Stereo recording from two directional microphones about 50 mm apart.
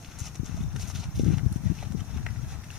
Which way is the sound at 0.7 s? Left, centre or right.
Centre.